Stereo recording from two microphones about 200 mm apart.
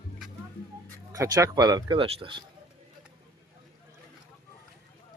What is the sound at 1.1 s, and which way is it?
Speech, 15° right (ahead or behind).